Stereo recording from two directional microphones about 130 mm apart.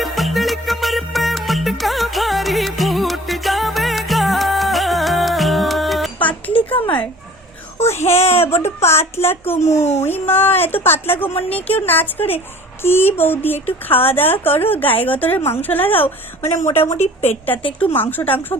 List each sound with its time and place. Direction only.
0.0 s music: centre (ahead or behind)
6.7 s a sound: 40° left (ahead or behind)
7.9 s a woman's voice: 20° left (ahead or behind)